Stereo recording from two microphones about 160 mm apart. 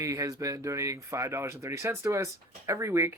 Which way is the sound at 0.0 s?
20° right (ahead or behind).